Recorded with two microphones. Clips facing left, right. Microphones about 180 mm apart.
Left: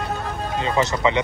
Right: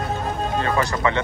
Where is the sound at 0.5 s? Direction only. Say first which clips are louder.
Left 2 dB; 20° left (ahead or behind).